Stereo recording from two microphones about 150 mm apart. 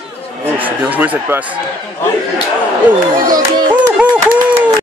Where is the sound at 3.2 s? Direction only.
25° right (ahead or behind).